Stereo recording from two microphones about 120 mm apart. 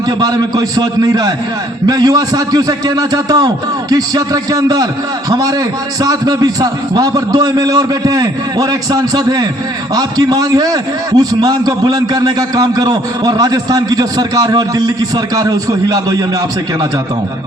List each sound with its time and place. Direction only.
0.2 s a man's voice: 30° right (ahead or behind)